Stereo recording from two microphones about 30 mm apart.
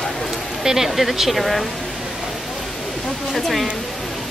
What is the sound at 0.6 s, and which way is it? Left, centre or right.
Speech, centre.